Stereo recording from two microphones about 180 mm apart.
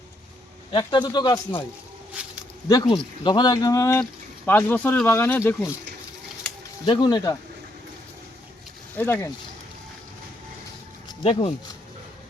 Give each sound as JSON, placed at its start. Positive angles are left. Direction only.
{"t": 0.7, "sound": "speech", "side_deg": 25}
{"t": 2.2, "sound": "a sound", "side_deg": -10}
{"t": 2.6, "sound": "speech", "side_deg": 25}
{"t": 6.8, "sound": "speech", "side_deg": 25}
{"t": 9.0, "sound": "speech", "side_deg": 10}
{"t": 11.2, "sound": "speech", "side_deg": 30}